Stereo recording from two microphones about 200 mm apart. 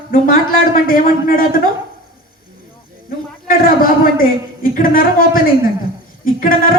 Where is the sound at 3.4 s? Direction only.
45° left (ahead or behind).